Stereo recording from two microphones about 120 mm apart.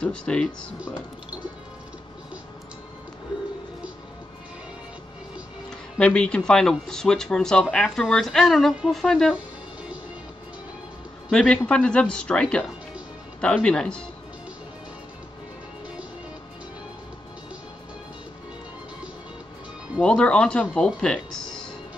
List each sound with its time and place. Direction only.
0.0 s speech: 10° left (ahead or behind)
5.7 s speech: 10° left (ahead or behind)
11.2 s speech: 5° left (ahead or behind)
20.0 s speech: 10° left (ahead or behind)